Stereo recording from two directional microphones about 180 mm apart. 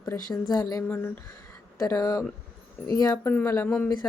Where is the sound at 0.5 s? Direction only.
15° left (ahead or behind).